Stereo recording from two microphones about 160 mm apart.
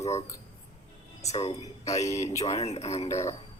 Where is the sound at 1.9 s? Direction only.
20° left (ahead or behind).